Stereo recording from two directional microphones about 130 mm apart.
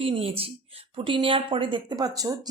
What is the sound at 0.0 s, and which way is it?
Speech, 45° right (ahead or behind).